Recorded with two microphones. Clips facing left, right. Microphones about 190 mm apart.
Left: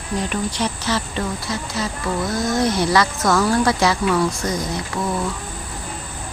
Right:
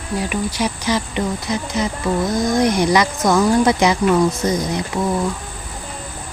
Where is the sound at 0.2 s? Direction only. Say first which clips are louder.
Right 2 dB; 10° right (ahead or behind).